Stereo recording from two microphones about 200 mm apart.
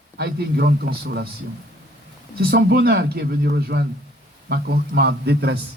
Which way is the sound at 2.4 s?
50° right (ahead or behind).